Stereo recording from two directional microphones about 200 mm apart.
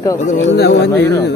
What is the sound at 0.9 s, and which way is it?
Speech, 15° left (ahead or behind).